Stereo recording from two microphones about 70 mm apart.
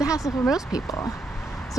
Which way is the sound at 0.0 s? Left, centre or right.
Left.